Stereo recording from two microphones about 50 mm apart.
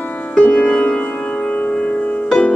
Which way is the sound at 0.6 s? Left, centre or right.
Left.